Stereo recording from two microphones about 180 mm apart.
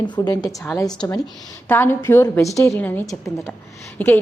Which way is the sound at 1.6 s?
10° left (ahead or behind).